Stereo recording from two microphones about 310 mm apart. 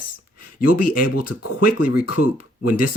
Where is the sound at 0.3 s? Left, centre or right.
Left.